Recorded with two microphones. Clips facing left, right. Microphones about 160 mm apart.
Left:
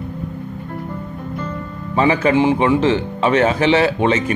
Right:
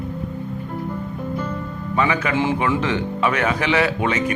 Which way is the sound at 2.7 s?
30° left (ahead or behind).